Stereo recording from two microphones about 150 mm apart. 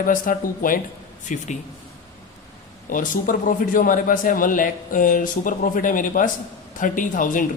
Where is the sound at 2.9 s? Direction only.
60° left (ahead or behind).